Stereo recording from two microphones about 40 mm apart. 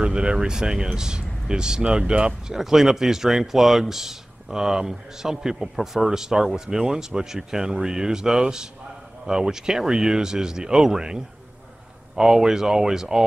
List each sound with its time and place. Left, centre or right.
0.0 s speech: right